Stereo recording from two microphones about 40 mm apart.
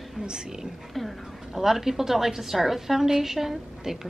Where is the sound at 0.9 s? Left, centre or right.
Centre.